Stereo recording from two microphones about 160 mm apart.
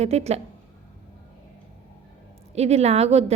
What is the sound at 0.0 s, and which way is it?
Speech, 40° right (ahead or behind).